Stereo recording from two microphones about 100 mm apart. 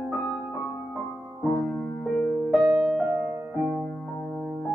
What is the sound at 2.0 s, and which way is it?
Music, 5° left (ahead or behind).